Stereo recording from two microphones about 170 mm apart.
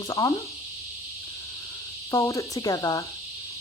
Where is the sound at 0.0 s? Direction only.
20° left (ahead or behind).